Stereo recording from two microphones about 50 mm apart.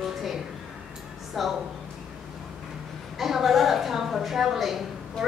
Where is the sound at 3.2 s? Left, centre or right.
Centre.